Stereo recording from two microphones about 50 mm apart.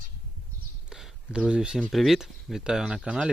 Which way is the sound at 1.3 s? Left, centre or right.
Centre.